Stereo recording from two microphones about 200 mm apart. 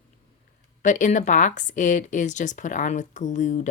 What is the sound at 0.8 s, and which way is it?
Speech, 40° left (ahead or behind).